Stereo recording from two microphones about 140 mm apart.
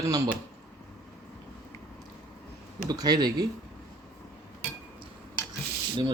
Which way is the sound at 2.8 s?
30° right (ahead or behind).